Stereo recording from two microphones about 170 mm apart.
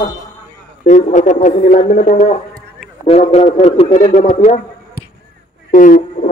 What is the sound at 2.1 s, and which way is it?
A man's voice, 40° left (ahead or behind).